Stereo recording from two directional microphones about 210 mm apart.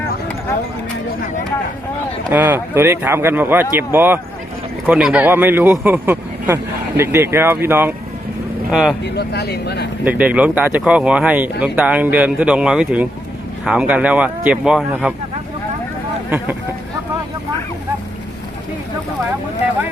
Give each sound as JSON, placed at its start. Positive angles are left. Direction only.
{"t": 2.3, "sound": "speech", "side_deg": -10}
{"t": 9.1, "sound": "speech", "side_deg": 50}
{"t": 10.0, "sound": "speech", "side_deg": -10}